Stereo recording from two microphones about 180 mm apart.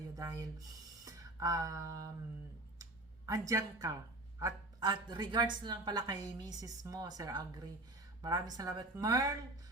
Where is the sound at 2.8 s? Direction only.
20° right (ahead or behind).